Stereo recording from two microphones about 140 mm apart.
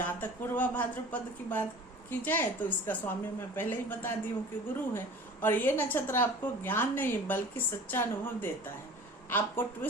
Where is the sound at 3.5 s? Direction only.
15° left (ahead or behind).